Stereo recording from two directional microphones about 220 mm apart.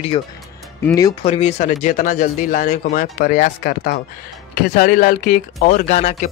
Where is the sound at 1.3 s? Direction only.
30° left (ahead or behind).